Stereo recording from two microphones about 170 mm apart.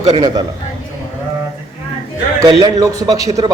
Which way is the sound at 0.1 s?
25° right (ahead or behind).